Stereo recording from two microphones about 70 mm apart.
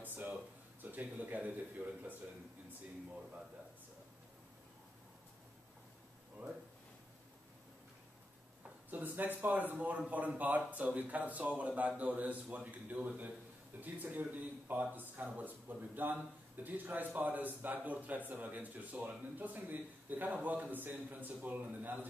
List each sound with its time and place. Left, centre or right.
0.0 s a sound: right
0.9 s speech: right
8.9 s speech: right